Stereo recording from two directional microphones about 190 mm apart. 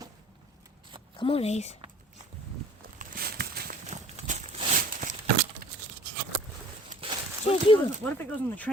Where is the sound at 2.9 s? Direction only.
50° right (ahead or behind).